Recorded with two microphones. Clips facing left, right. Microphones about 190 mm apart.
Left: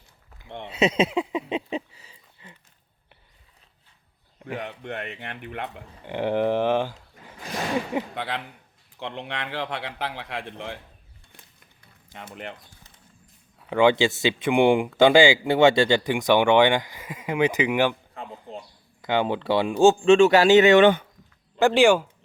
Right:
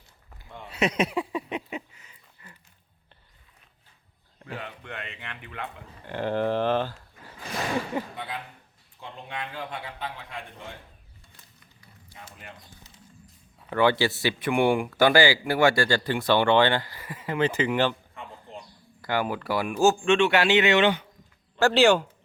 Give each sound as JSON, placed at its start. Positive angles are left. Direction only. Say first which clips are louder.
{"t": 0.6, "sound": "a sound", "louder": "left 4 dB", "side_deg": 25}
{"t": 4.4, "sound": "a sound", "louder": "left 5 dB", "side_deg": 15}
{"t": 4.6, "sound": "speech", "louder": "left 6 dB", "side_deg": 65}
{"t": 6.1, "sound": "speech", "louder": "left 3 dB", "side_deg": 15}
{"t": 8.1, "sound": "a man's voice", "louder": "left 5 dB", "side_deg": 90}
{"t": 12.1, "sound": "speech", "louder": "left 8 dB", "side_deg": 70}
{"t": 13.7, "sound": "speech", "louder": "left 3 dB", "side_deg": 15}
{"t": 19.0, "sound": "speech", "louder": "left 4 dB", "side_deg": 25}
{"t": 21.6, "sound": "speech", "louder": "left 2 dB", "side_deg": 10}